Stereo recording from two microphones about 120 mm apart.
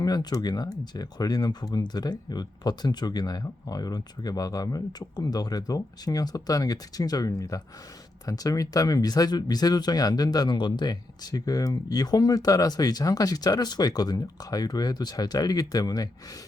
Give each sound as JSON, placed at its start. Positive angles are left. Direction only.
{"t": 0.0, "sound": "speech", "side_deg": 35}